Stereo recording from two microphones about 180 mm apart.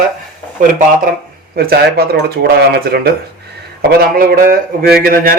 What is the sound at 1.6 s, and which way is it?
Speech, 60° right (ahead or behind).